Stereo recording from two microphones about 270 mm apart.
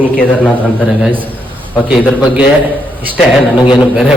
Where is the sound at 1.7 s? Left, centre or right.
Centre.